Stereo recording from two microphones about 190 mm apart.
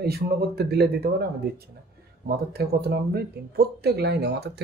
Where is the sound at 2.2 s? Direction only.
55° right (ahead or behind).